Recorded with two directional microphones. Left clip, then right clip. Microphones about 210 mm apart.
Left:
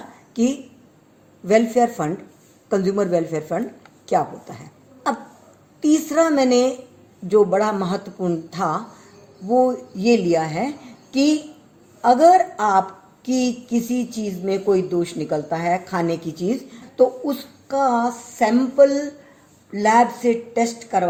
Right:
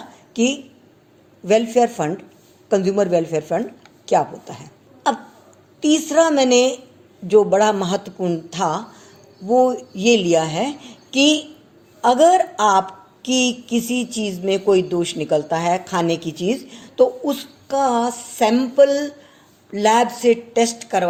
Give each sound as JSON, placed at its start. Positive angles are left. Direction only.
{"t": 0.4, "sound": "a woman's voice", "side_deg": -25}
{"t": 12.0, "sound": "speech", "side_deg": -35}